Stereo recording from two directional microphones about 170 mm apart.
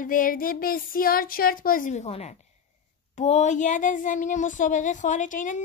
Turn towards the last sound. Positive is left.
turn(degrees=50)  # may be behind; listen again after turning